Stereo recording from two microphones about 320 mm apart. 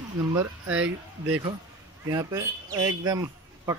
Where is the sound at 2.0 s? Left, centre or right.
Centre.